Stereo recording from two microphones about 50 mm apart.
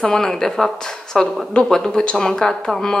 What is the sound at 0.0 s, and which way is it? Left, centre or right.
Speech, centre.